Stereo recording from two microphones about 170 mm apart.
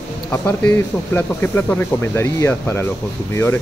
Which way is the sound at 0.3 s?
10° left (ahead or behind).